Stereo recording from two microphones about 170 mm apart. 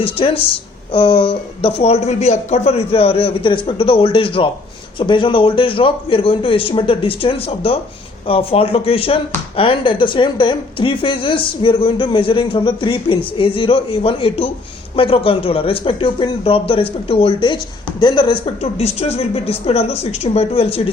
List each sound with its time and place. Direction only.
0.0 s speech: 35° left (ahead or behind)